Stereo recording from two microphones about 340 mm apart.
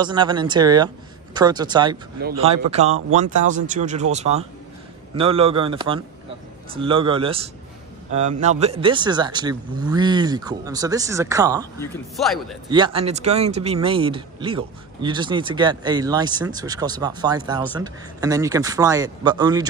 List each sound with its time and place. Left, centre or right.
0.0 s speech: centre
11.8 s speech: centre
12.6 s speech: centre